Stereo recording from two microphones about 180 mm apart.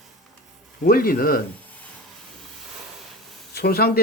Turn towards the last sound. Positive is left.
turn(degrees=60)  # may be behind; listen again after turning